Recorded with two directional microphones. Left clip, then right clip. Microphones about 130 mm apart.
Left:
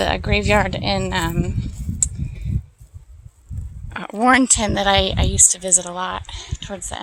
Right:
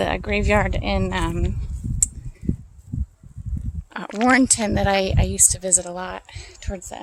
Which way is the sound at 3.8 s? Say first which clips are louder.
Left 2 dB; 20° right (ahead or behind).